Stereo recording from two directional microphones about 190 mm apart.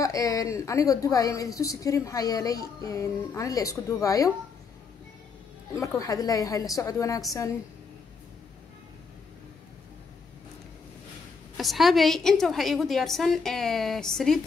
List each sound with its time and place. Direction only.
0.0 s a woman's voice: 20° left (ahead or behind)
5.8 s a woman's voice: 15° left (ahead or behind)
11.5 s a woman's voice: centre (ahead or behind)